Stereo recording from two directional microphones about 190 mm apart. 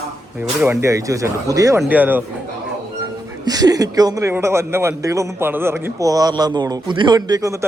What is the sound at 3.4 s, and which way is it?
Speech, 20° right (ahead or behind).